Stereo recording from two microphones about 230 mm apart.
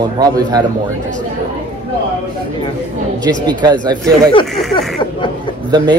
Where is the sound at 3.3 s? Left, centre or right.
Centre.